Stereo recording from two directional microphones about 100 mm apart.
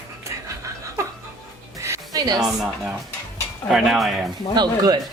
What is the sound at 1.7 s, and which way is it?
Music, 30° right (ahead or behind).